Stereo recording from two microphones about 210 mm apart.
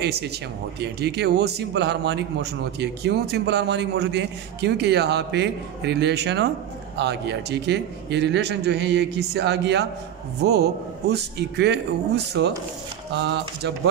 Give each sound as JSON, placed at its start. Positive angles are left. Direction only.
{"t": 0.0, "sound": "a man's voice", "side_deg": -50}